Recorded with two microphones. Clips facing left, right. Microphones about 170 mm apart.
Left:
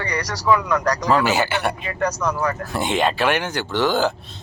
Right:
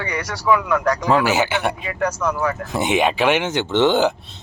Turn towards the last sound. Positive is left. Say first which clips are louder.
# right 4 dB
turn(degrees=-20)  # may be behind; listen again after turning